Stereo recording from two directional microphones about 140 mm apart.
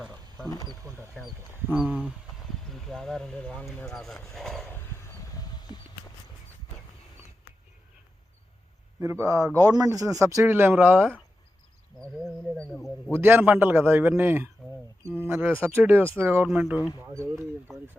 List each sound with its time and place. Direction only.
0.4 s speech: 25° left (ahead or behind)
0.7 s speech: 20° right (ahead or behind)
1.9 s a man's voice: 10° right (ahead or behind)
2.6 s speech: 5° left (ahead or behind)
4.7 s a sound: 20° left (ahead or behind)
5.7 s mouse: 30° left (ahead or behind)
9.0 s speech: 20° right (ahead or behind)
12.2 s speech: 10° left (ahead or behind)
13.1 s a man's voice: 15° right (ahead or behind)